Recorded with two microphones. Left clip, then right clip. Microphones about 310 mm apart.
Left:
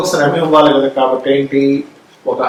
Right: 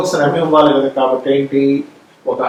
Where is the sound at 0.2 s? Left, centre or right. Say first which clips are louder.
Left 1 dB; centre.